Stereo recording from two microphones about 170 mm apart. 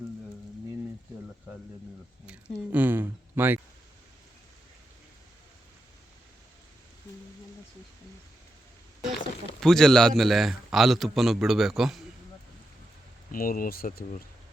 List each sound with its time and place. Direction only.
2.2 s a sound: 10° right (ahead or behind)
9.6 s a man's voice: 5° left (ahead or behind)
13.3 s speech: 55° left (ahead or behind)